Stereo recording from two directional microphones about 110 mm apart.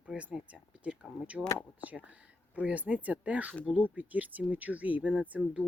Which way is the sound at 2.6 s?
15° right (ahead or behind).